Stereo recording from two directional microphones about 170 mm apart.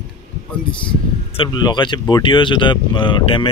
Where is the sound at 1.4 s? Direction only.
25° left (ahead or behind).